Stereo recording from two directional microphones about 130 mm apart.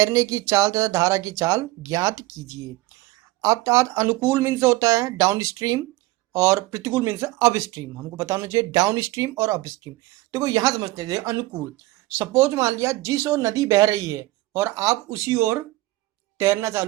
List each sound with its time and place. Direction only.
0.0 s speech: 25° right (ahead or behind)